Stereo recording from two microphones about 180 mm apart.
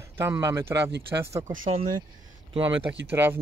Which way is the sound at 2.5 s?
30° right (ahead or behind).